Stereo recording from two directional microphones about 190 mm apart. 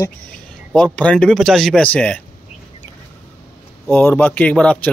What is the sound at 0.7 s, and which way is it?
Speech, 5° left (ahead or behind).